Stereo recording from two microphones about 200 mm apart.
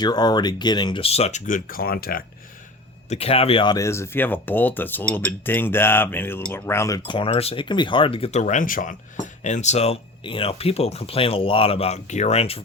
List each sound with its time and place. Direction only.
0.0 s speech: 20° left (ahead or behind); by 2.2 s 45° left (ahead or behind)
3.1 s speech: 30° left (ahead or behind); by 7.0 s 15° left (ahead or behind)
7.0 s speech: 25° left (ahead or behind)